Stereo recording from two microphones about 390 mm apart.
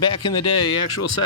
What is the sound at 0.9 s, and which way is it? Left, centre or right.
Speech, left.